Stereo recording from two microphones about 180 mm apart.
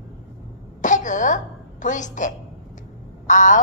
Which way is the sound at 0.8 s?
45° left (ahead or behind).